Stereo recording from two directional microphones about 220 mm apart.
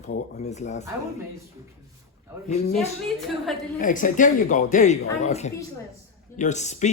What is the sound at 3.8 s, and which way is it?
Speech, 35° left (ahead or behind).